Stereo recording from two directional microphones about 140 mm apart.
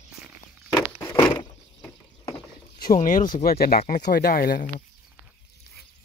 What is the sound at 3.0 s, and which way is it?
Speech, 70° left (ahead or behind).